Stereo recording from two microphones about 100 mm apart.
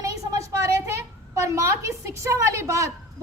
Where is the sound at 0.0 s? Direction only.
35° right (ahead or behind).